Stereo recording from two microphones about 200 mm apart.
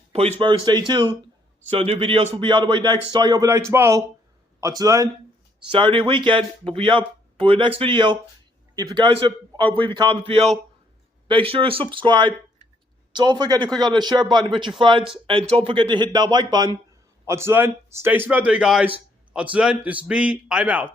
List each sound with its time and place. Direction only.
0.1 s a man's voice: 30° right (ahead or behind); by 20.8 s 5° right (ahead or behind)